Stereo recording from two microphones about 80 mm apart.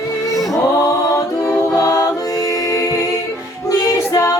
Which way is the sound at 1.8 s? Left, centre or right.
Left.